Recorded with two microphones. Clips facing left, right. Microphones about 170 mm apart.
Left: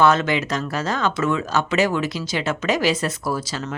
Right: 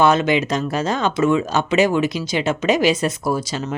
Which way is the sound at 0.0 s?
15° right (ahead or behind).